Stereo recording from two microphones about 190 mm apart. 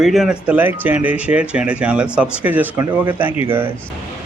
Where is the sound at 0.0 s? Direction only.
Centre (ahead or behind).